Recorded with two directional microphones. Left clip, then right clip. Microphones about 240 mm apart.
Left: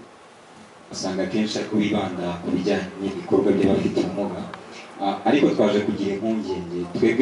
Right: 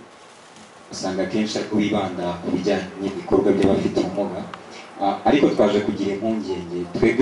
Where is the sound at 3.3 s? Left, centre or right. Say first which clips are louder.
Right 2 dB; centre.